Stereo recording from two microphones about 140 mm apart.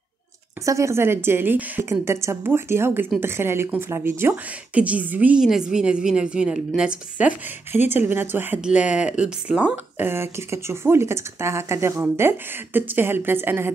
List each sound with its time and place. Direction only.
0.7 s speech: 20° right (ahead or behind)